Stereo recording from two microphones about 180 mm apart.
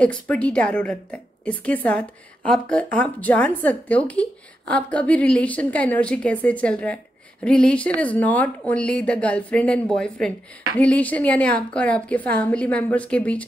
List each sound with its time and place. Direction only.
0.0 s a woman's voice: 5° left (ahead or behind)